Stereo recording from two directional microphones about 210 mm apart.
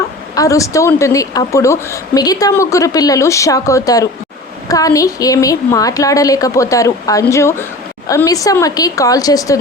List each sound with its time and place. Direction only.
0.3 s a woman's voice: 15° left (ahead or behind)